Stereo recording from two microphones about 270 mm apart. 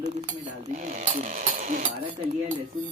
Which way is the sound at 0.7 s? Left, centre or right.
Right.